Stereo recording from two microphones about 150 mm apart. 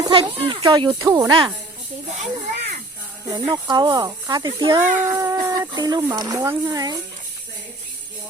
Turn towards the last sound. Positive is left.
turn(degrees=-25)  # may be behind; listen again after turning